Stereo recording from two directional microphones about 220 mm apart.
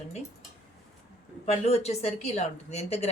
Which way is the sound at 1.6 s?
30° left (ahead or behind).